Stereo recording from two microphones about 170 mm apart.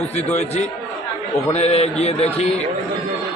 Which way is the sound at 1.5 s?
40° left (ahead or behind).